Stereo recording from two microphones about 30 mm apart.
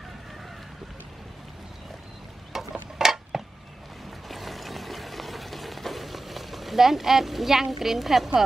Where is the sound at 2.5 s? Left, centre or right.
Centre.